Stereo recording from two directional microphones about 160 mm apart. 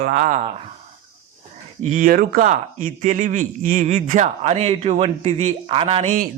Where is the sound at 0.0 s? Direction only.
55° right (ahead or behind).